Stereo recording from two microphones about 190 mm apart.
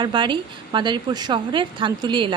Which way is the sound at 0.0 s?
25° right (ahead or behind).